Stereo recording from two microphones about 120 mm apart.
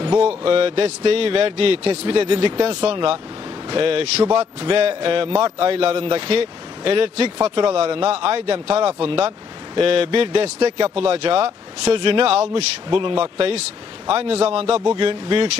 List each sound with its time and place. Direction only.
0.4 s a man's voice: 50° right (ahead or behind)
2.6 s a man's voice: 60° right (ahead or behind)
13.0 s a man's voice: 45° right (ahead or behind)